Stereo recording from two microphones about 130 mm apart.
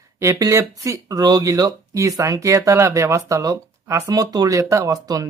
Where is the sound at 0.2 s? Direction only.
25° right (ahead or behind).